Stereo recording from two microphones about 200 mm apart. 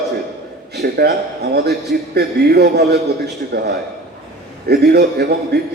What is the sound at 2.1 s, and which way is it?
A man's voice, 55° right (ahead or behind).